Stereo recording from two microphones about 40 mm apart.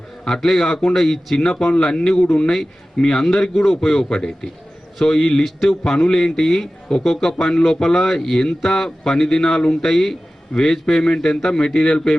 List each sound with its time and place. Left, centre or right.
0.3 s speech: centre
1.5 s speech: centre